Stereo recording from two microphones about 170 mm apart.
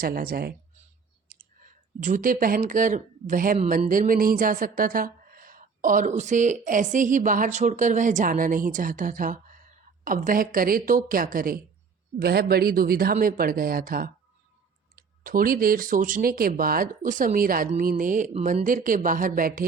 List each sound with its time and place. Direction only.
0.0 s speech: 60° right (ahead or behind)
1.3 s clicking: 60° right (ahead or behind)
1.6 s speech: 50° right (ahead or behind)